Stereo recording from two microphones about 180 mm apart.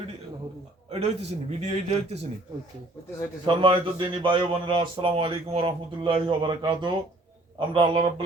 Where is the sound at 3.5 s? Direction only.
30° right (ahead or behind).